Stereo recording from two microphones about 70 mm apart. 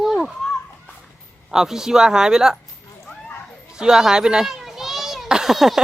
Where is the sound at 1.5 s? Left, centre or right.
Centre.